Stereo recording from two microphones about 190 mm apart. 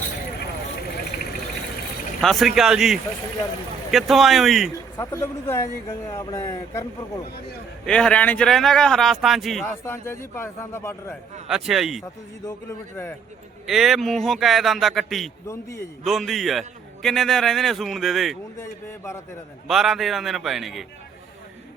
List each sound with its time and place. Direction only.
1.1 s a sound: 50° left (ahead or behind)
2.2 s a man's voice: centre (ahead or behind)
4.9 s a man's voice: 15° left (ahead or behind)
7.9 s a man's voice: 5° left (ahead or behind)
9.6 s a man's voice: 15° left (ahead or behind)
11.4 s a man's voice: 5° right (ahead or behind)
13.7 s a man's voice: centre (ahead or behind)
15.4 s a man's voice: 15° left (ahead or behind)
16.0 s a man's voice: centre (ahead or behind)
18.6 s a man's voice: 15° left (ahead or behind)
19.6 s a man's voice: centre (ahead or behind)